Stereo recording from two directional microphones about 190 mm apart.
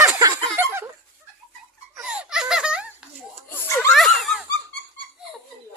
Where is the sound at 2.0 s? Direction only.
5° right (ahead or behind).